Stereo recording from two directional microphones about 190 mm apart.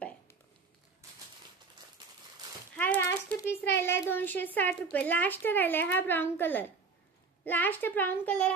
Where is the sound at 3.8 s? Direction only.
10° left (ahead or behind).